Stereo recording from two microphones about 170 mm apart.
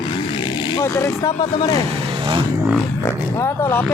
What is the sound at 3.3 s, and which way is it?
Speech, 15° left (ahead or behind).